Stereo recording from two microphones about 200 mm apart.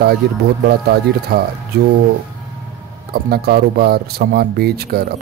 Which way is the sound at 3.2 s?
50° right (ahead or behind).